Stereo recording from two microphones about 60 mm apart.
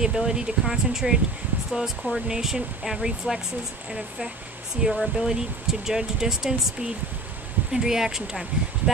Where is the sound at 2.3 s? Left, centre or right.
Centre.